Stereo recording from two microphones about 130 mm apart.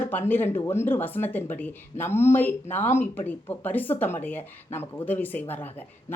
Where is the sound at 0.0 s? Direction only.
15° left (ahead or behind).